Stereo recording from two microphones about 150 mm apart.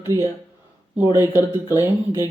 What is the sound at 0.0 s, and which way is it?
Speech, 20° right (ahead or behind).